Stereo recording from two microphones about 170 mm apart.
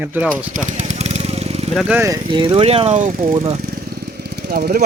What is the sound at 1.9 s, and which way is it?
Speech, 20° right (ahead or behind).